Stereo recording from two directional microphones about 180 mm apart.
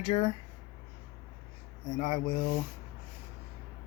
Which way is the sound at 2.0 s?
35° left (ahead or behind).